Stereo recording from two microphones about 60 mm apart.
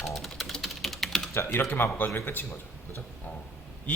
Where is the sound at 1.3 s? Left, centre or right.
Left.